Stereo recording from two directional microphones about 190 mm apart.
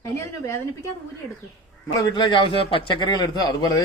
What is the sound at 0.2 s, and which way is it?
Speech, 15° left (ahead or behind).